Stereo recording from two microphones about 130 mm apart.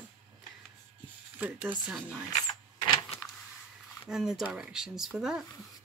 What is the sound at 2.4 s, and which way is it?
Power windows, 30° left (ahead or behind).